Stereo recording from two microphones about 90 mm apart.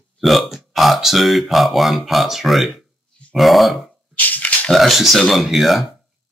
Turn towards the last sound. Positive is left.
turn(degrees=0)  # may be behind; listen again after turning